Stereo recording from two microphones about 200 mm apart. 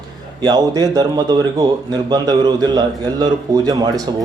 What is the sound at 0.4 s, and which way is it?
Speech, 20° right (ahead or behind).